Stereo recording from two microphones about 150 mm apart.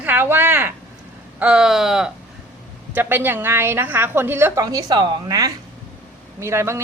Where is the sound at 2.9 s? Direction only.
15° right (ahead or behind).